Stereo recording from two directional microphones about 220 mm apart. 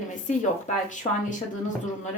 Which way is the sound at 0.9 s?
35° left (ahead or behind).